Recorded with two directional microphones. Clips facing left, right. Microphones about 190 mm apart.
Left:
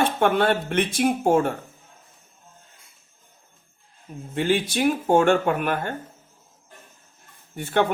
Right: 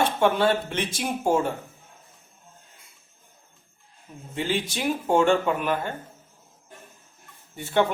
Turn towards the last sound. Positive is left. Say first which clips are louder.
# even
turn(degrees=55)  # may be behind; listen again after turning